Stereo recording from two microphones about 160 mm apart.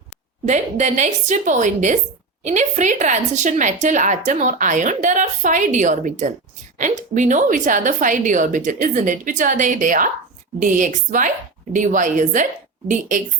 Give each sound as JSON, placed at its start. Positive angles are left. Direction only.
{"t": 0.4, "sound": "a woman's voice", "side_deg": -45}